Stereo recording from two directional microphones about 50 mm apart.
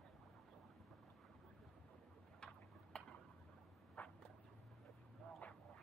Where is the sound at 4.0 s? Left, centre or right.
Left.